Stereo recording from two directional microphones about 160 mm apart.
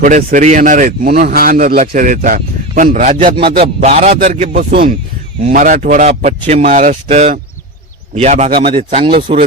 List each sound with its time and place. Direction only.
0.0 s speech: 55° right (ahead or behind)
3.8 s speech: 40° right (ahead or behind)
5.5 s a man's voice: 50° right (ahead or behind)
8.6 s speech: 35° right (ahead or behind)